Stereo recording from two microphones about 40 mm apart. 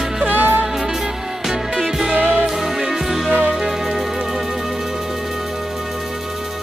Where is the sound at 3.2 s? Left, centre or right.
Right.